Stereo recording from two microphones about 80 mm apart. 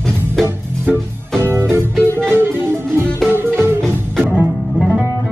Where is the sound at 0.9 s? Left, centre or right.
Centre.